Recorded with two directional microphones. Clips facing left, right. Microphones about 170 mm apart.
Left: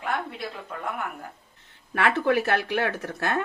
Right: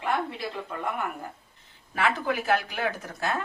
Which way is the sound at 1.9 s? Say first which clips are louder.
Left 4 dB; 70° left (ahead or behind).